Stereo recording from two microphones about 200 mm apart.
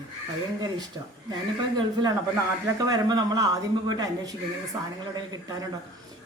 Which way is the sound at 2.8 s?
20° right (ahead or behind).